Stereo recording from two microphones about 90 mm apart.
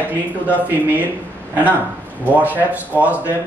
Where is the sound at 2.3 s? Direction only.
20° right (ahead or behind).